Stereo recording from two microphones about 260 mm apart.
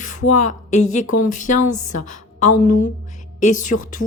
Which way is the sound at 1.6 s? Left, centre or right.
Left.